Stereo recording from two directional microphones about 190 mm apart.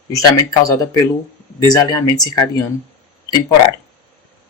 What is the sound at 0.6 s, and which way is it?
Speech, 20° left (ahead or behind).